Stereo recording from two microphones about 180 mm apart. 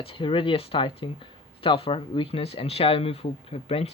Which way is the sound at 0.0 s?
30° left (ahead or behind).